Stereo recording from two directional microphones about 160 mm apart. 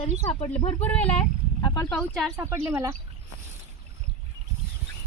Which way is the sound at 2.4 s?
15° right (ahead or behind).